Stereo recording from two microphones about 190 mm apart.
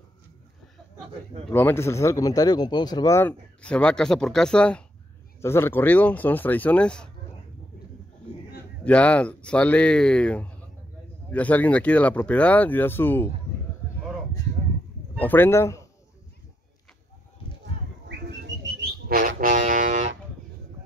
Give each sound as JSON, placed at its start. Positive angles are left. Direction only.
{"t": 1.5, "sound": "speech", "side_deg": 10}
{"t": 8.8, "sound": "speech", "side_deg": 5}
{"t": 15.1, "sound": "speech", "side_deg": 10}
{"t": 18.8, "sound": "a sound", "side_deg": -55}